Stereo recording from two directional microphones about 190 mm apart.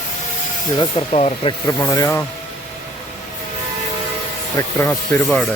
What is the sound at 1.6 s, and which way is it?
Speech, 20° left (ahead or behind).